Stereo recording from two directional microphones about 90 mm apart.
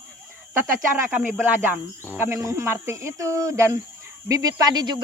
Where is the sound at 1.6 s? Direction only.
25° right (ahead or behind).